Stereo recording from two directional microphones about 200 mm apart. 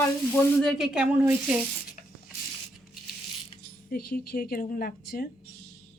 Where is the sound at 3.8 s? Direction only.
50° left (ahead or behind).